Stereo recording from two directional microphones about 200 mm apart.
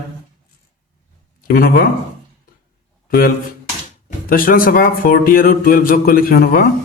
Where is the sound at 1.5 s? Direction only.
50° left (ahead or behind).